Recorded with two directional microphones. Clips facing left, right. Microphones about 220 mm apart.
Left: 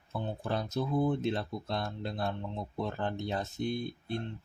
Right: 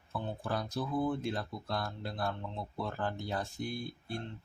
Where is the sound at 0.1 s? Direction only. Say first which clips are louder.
Left 2 dB; 25° left (ahead or behind).